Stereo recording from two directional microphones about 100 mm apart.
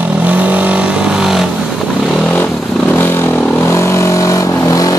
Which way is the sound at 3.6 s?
30° left (ahead or behind).